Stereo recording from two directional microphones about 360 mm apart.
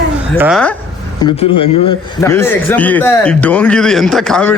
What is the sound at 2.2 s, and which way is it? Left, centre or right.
Speech, centre.